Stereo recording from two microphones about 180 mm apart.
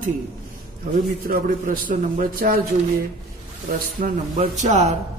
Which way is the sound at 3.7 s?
45° right (ahead or behind).